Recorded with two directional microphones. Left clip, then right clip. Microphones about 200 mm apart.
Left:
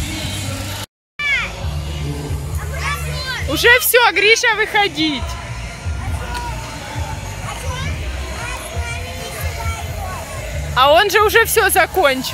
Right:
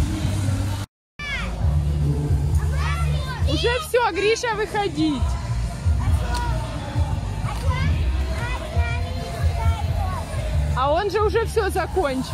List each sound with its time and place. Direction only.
1.2 s music: 20° right (ahead or behind)
3.6 s speech: 10° left (ahead or behind)
10.8 s speech: 10° left (ahead or behind)